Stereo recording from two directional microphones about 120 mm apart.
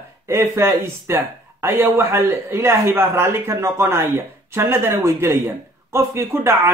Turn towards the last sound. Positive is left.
turn(degrees=-20)  # may be behind; listen again after turning